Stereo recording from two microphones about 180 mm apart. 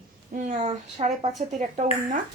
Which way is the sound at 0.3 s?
45° right (ahead or behind).